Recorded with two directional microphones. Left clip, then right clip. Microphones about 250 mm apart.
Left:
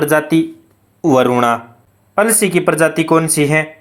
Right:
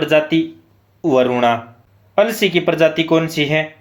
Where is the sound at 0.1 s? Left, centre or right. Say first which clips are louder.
Left 1 dB; centre.